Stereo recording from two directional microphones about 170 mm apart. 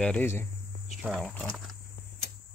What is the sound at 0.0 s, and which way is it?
Cricket, 10° left (ahead or behind).